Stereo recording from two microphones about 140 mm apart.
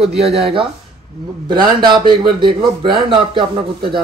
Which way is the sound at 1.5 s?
30° right (ahead or behind).